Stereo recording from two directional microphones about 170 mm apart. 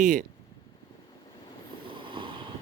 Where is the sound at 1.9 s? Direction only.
30° right (ahead or behind).